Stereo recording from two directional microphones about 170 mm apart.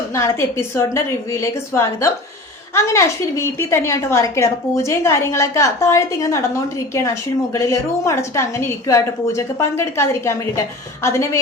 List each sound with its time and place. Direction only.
0.1 s a woman's voice: 15° left (ahead or behind)